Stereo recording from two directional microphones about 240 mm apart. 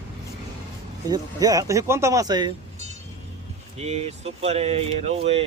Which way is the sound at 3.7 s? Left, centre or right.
Right.